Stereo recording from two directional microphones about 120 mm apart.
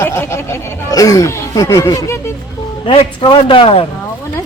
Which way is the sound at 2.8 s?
50° left (ahead or behind).